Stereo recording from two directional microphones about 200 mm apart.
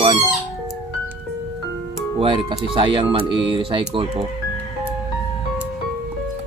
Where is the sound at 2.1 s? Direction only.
25° right (ahead or behind).